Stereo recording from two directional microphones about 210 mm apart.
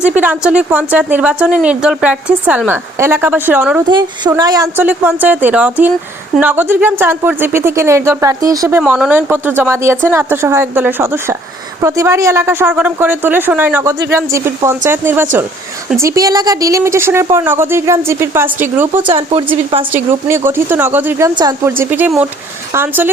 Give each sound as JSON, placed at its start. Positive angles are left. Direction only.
{"t": 0.2, "sound": "speech", "side_deg": -5}
{"t": 3.8, "sound": "speech", "side_deg": -20}
{"t": 8.8, "sound": "speech", "side_deg": -5}
{"t": 19.0, "sound": "speech", "side_deg": -25}
{"t": 19.9, "sound": "speech", "side_deg": -10}